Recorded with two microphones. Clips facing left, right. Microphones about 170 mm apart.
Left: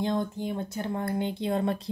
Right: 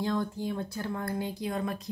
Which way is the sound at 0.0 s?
20° left (ahead or behind).